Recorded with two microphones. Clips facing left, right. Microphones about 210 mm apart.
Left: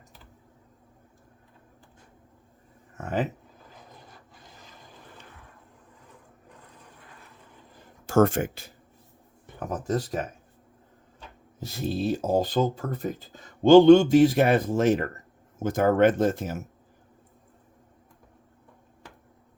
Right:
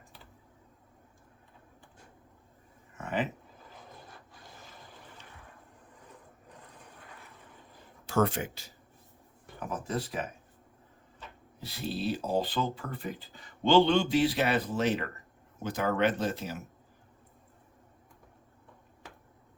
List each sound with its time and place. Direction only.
3.0 s a sound: 40° left (ahead or behind)
8.0 s speech: 45° left (ahead or behind)
11.6 s speech: 45° left (ahead or behind)